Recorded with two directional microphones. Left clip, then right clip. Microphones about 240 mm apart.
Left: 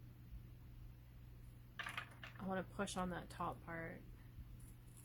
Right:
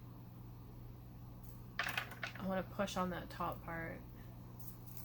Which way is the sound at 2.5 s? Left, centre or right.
Left.